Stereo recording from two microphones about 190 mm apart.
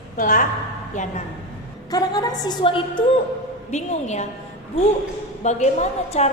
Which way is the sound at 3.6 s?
35° left (ahead or behind).